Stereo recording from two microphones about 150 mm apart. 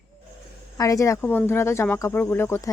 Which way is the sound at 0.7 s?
20° left (ahead or behind).